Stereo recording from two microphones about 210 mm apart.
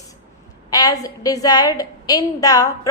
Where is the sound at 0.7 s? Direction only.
15° left (ahead or behind).